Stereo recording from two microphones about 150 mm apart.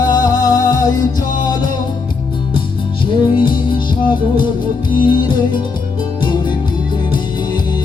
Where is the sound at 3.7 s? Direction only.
30° left (ahead or behind).